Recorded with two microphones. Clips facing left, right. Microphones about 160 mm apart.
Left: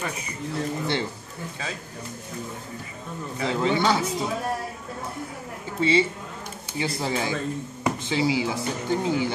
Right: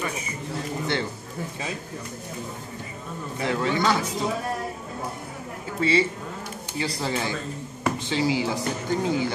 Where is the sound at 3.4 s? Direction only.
25° left (ahead or behind).